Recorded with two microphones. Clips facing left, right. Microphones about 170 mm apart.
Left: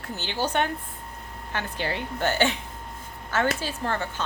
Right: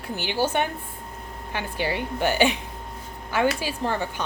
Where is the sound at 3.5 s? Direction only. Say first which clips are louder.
Right 2 dB; 15° right (ahead or behind).